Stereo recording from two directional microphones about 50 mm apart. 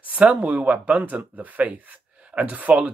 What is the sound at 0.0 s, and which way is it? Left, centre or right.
Speech, right.